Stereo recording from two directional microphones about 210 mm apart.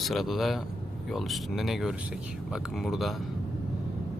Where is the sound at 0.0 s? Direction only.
Centre (ahead or behind).